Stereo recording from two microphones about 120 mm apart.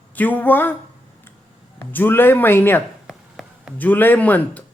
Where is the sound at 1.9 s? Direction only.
15° left (ahead or behind).